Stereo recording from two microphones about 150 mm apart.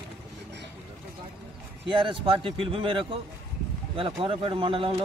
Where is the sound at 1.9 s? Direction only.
35° right (ahead or behind).